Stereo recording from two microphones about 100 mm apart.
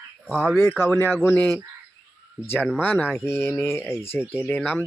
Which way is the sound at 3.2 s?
25° left (ahead or behind).